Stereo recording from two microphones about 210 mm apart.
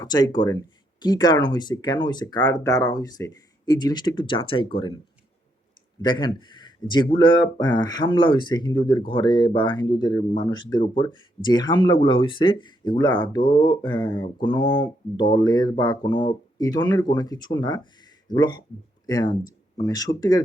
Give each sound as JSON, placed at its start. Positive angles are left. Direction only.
{"t": 0.0, "sound": "speech", "side_deg": 20}
{"t": 6.0, "sound": "speech", "side_deg": 20}